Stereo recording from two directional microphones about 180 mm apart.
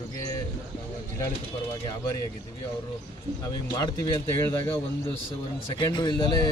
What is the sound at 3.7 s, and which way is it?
A man's voice, 20° left (ahead or behind).